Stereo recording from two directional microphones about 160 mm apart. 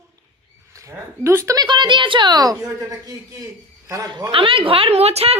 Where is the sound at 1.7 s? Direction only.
30° right (ahead or behind).